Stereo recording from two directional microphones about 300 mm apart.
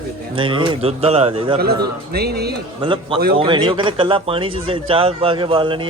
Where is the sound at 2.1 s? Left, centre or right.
Right.